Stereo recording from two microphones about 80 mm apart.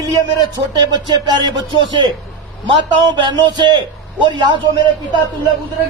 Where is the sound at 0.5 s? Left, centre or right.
Right.